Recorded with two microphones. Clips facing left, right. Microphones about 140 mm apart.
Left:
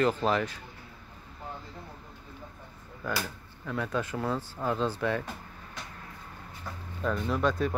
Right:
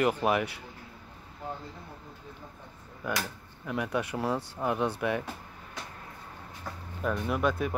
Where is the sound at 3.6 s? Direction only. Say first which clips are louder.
Right 1 dB; 15° right (ahead or behind).